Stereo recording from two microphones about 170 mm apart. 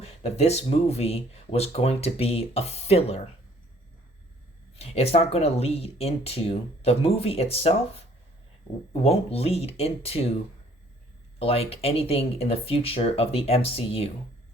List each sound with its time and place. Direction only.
0.0 s speech: 40° left (ahead or behind)
4.8 s speech: 35° left (ahead or behind)
8.9 s speech: 35° left (ahead or behind)
11.3 s speech: 35° left (ahead or behind)